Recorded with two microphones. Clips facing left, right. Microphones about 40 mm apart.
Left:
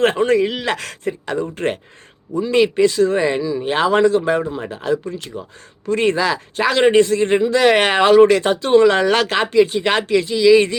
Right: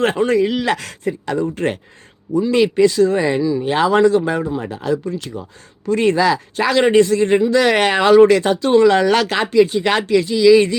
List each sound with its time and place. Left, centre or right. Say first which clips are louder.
0.0 s speech: even; left